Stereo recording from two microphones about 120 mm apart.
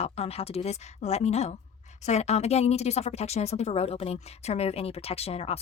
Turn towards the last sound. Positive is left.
turn(degrees=55)  # may be behind; listen again after turning